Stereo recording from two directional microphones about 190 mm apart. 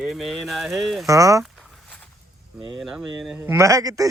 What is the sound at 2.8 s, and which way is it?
Speech, 5° right (ahead or behind).